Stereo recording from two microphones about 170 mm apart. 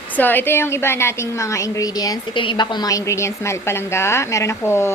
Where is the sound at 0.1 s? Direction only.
10° left (ahead or behind).